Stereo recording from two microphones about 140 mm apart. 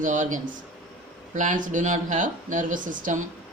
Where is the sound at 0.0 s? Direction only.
65° right (ahead or behind).